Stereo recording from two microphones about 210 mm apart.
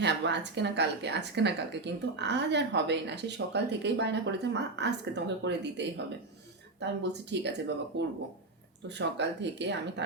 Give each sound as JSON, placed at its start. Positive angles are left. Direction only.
{"t": 0.0, "sound": "a woman's voice", "side_deg": -55}